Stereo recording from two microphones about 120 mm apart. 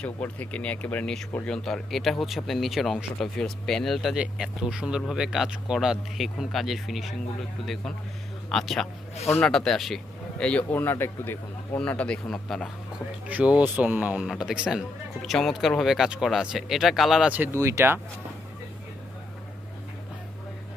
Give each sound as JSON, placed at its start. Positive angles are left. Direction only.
{"t": 0.0, "sound": "speech", "side_deg": 10}
{"t": 13.2, "sound": "speech", "side_deg": -10}